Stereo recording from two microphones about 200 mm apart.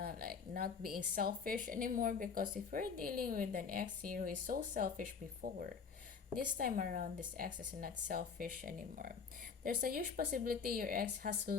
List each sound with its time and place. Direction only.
0.0 s a woman's voice: 50° right (ahead or behind)